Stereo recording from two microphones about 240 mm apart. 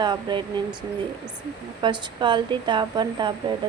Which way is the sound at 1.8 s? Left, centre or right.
Centre.